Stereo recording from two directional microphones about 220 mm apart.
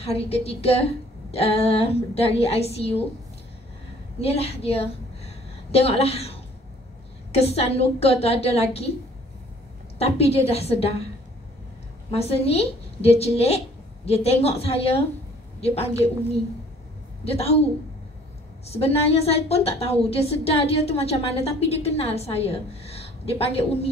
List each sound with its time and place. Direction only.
0.0 s a woman's voice: 25° left (ahead or behind)
4.2 s a woman's voice: 25° left (ahead or behind)
9.9 s a woman's voice: 25° left (ahead or behind)
12.1 s a woman's voice: 25° left (ahead or behind)
17.2 s a woman's voice: 30° left (ahead or behind)
18.7 s a woman's voice: 30° left (ahead or behind)